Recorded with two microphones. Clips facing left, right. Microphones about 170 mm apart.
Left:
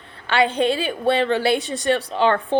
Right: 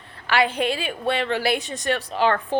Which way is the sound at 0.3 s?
30° left (ahead or behind).